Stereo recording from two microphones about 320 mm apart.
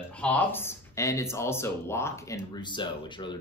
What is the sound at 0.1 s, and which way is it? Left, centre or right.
Speech, centre.